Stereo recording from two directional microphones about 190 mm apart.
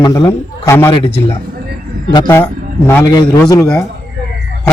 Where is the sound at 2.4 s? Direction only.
10° left (ahead or behind).